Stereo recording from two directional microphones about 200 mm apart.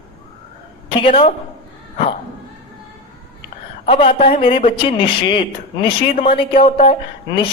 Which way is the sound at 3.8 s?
25° left (ahead or behind).